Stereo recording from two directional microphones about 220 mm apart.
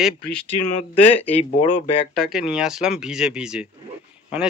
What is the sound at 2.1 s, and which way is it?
Speech, centre (ahead or behind).